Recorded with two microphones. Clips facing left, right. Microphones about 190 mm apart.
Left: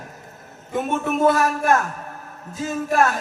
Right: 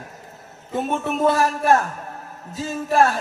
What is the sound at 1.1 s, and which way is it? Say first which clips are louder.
Speech: left 1 dB; 30° right (ahead or behind).